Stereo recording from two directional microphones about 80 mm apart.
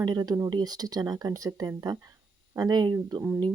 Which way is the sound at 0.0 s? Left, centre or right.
Right.